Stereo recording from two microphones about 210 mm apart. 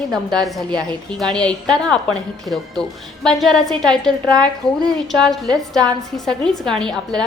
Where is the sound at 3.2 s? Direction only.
Centre (ahead or behind).